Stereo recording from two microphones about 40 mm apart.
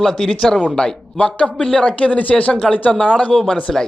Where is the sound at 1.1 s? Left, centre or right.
Left.